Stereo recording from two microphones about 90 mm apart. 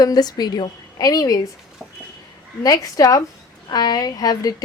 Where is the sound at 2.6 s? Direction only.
40° left (ahead or behind).